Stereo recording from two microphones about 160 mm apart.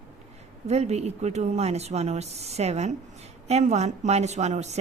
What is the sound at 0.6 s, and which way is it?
Speech, 40° right (ahead or behind).